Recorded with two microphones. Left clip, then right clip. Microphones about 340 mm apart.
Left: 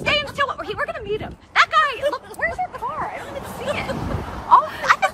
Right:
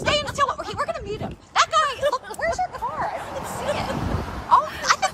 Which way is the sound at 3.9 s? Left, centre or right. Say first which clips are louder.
Even; centre.